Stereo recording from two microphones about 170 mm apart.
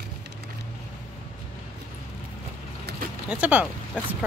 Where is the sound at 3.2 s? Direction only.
10° right (ahead or behind).